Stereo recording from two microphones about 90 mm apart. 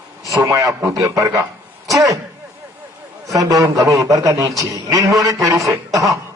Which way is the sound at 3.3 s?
40° right (ahead or behind).